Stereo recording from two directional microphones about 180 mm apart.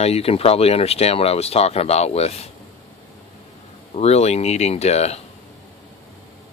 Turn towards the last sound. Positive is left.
turn(degrees=35)  # may be behind; listen again after turning